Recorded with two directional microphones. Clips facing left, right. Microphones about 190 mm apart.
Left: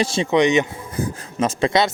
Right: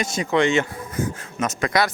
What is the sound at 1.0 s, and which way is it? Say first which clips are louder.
Speech: left 3 dB; 30° left (ahead or behind).